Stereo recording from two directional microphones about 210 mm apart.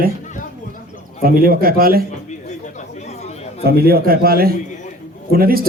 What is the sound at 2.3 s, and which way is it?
Chatter, 35° left (ahead or behind).